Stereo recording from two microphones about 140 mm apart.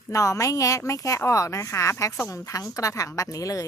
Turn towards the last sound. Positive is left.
turn(degrees=25)  # may be behind; listen again after turning